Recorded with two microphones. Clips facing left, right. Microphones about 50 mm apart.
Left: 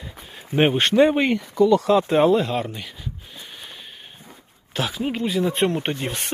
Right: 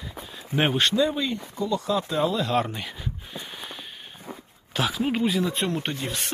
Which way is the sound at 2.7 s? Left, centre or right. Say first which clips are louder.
Right 1 dB; centre.